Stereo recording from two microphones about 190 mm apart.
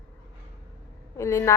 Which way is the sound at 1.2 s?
15° left (ahead or behind).